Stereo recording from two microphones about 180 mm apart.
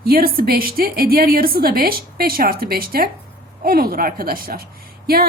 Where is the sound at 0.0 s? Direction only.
55° right (ahead or behind).